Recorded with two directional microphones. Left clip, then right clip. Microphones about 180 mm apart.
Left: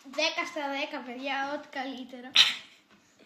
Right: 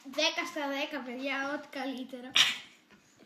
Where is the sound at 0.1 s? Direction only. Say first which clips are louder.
Left 1 dB; 25° right (ahead or behind).